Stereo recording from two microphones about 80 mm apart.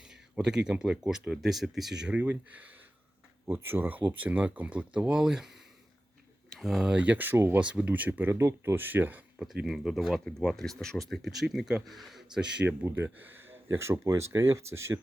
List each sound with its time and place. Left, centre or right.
0.0 s speech: centre
6.9 s speech: centre
7.6 s speech: centre
8.3 s speech: right
9.4 s speech: centre
12.6 s speech: right